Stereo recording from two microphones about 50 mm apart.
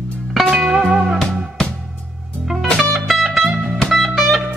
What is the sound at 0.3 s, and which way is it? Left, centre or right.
Music, centre.